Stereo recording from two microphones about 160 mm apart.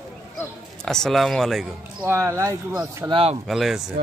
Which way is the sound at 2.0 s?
15° right (ahead or behind).